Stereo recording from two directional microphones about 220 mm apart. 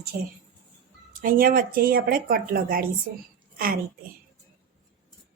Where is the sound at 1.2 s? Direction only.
40° right (ahead or behind).